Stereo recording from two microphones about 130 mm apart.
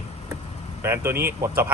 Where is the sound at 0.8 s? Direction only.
20° right (ahead or behind).